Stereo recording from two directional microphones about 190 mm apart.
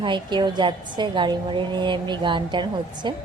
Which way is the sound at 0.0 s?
25° right (ahead or behind).